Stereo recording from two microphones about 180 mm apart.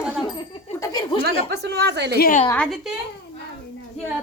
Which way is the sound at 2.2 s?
50° left (ahead or behind).